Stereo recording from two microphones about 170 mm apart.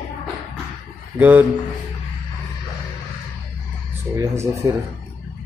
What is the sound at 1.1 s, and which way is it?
Speech, 10° right (ahead or behind).